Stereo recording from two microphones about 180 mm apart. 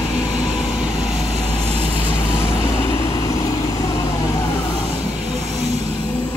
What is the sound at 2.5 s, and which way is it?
Vehicle, 25° left (ahead or behind).